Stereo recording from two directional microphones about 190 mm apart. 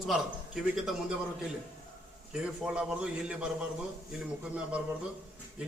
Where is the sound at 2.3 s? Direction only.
5° right (ahead or behind).